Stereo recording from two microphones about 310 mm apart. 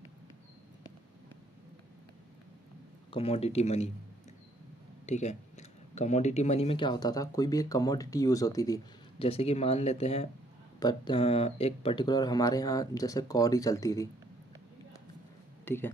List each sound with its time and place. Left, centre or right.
3.1 s speech: centre
5.0 s speech: left
15.6 s speech: centre